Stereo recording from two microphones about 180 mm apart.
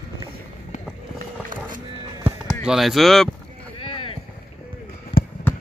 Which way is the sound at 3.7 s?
30° left (ahead or behind).